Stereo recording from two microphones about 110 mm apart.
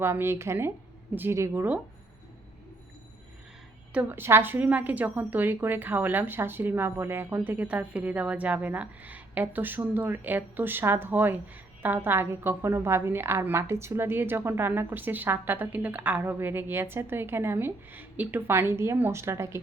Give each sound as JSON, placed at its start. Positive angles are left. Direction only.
{"t": 0.0, "sound": "a woman's voice", "side_deg": -20}
{"t": 3.9, "sound": "a woman's voice", "side_deg": -20}